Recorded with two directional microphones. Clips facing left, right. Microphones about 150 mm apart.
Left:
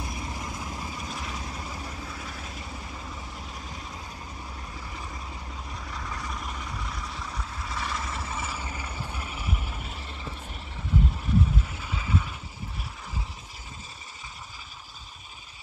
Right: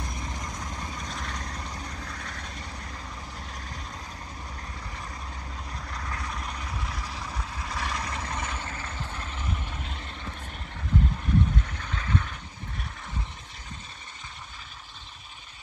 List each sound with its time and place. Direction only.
0.0 s vehicle: 5° left (ahead or behind)
5.7 s vehicle: centre (ahead or behind)